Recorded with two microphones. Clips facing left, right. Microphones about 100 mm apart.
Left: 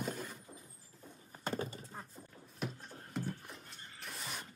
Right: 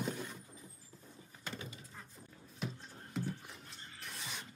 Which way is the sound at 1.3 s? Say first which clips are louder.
Left 8 dB; 40° left (ahead or behind).